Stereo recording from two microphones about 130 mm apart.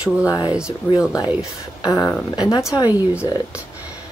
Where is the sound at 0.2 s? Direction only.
30° left (ahead or behind).